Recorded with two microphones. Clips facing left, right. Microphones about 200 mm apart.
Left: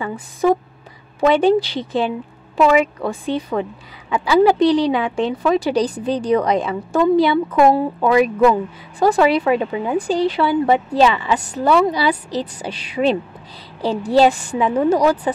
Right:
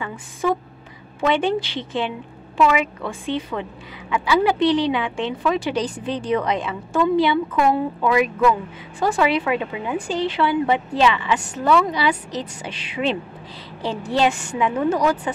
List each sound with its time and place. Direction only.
0.0 s a woman's voice: 40° left (ahead or behind)